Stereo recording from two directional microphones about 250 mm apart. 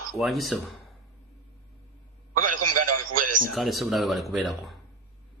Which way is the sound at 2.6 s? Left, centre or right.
Right.